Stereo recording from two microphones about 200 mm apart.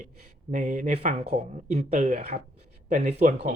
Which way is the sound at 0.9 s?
55° right (ahead or behind).